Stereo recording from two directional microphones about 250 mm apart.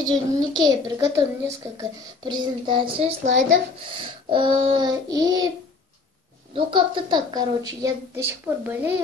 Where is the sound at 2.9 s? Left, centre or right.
Right.